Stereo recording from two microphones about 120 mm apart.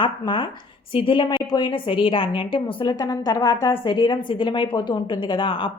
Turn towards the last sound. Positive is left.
turn(degrees=45)  # may be behind; listen again after turning